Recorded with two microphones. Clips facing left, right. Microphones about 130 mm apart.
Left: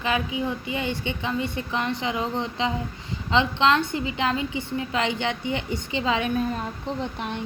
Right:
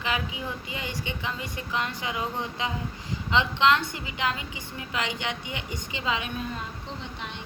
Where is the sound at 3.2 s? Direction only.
30° left (ahead or behind).